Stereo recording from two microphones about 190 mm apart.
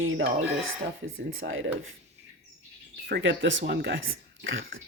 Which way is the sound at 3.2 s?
80° right.